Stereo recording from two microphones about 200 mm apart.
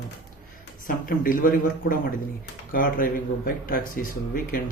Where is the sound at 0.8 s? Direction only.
45° left (ahead or behind).